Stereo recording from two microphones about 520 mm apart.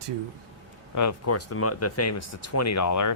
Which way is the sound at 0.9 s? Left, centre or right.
Left.